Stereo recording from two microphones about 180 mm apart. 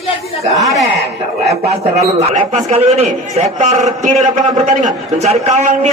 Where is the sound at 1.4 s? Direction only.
35° right (ahead or behind).